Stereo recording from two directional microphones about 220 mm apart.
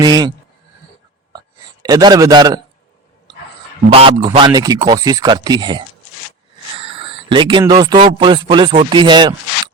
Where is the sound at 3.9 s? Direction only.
25° right (ahead or behind).